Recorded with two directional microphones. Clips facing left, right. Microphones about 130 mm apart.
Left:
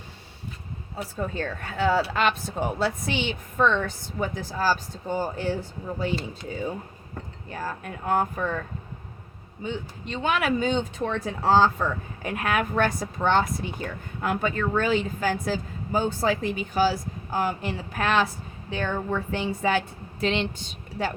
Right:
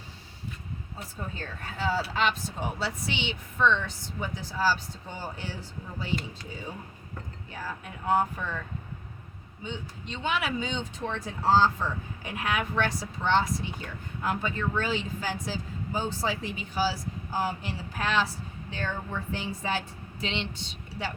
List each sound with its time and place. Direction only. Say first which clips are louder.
0.9 s speech: left 10 dB; 70° left (ahead or behind); by 8.6 s 50° left (ahead or behind)
9.6 s speech: left 6 dB; 55° left (ahead or behind)
20.2 s speech: left 8 dB; 50° left (ahead or behind)